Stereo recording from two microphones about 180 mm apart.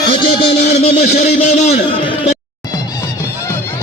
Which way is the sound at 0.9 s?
65° left (ahead or behind).